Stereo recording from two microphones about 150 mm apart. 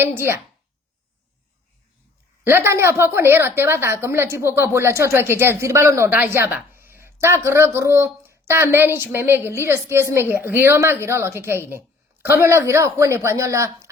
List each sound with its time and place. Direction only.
0.0 s speech: 15° right (ahead or behind)
2.5 s speech: 15° right (ahead or behind)